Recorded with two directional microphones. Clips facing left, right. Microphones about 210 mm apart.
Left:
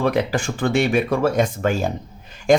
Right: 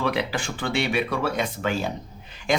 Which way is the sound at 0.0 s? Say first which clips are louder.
Left 6 dB; 45° left (ahead or behind).